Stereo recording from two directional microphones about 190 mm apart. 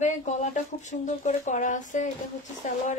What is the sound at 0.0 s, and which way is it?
Speech, 40° left (ahead or behind).